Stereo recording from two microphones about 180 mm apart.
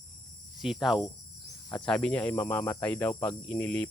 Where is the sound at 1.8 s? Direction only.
5° left (ahead or behind).